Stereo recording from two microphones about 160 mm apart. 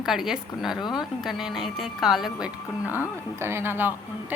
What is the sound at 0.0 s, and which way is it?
A woman's voice, 5° right (ahead or behind).